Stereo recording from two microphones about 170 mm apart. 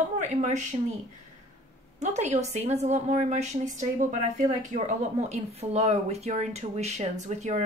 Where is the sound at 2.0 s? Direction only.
45° right (ahead or behind).